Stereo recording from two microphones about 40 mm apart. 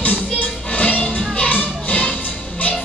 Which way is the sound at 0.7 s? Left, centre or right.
Left.